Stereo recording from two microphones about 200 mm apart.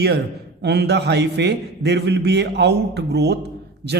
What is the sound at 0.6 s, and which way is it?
Speech, 55° right (ahead or behind).